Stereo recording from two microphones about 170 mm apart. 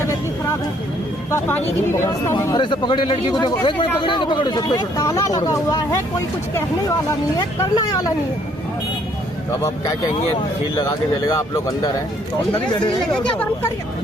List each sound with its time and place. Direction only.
1.3 s speech: 10° left (ahead or behind)
7.3 s speech: 20° left (ahead or behind)
11.3 s speech: 20° left (ahead or behind)